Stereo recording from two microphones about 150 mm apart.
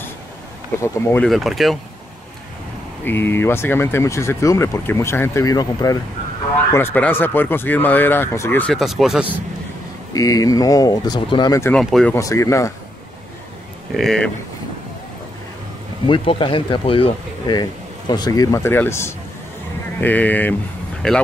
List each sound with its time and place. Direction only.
1.2 s speech: centre (ahead or behind)
3.1 s speech: 15° left (ahead or behind)
6.7 s speech: 15° left (ahead or behind)
8.7 s speech: centre (ahead or behind)
10.1 s speech: 25° left (ahead or behind)
11.7 s speech: 5° left (ahead or behind)
12.1 s speech: 20° left (ahead or behind)
13.9 s speech: 5° left (ahead or behind)
16.1 s speech: 35° left (ahead or behind); by 21.2 s 5° left (ahead or behind)